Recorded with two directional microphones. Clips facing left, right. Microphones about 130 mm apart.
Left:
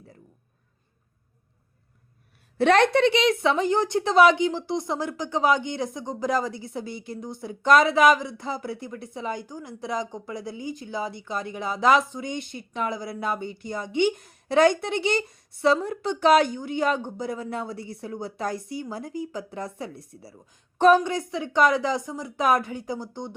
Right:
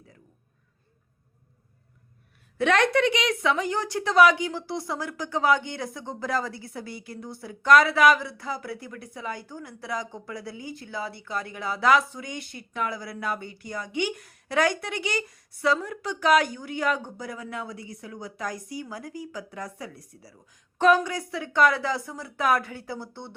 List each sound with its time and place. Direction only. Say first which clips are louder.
2.6 s a woman's voice: left 3 dB; 30° left (ahead or behind); by 23.3 s 15° left (ahead or behind)